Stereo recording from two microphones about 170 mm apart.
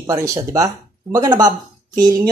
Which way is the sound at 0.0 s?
20° right (ahead or behind).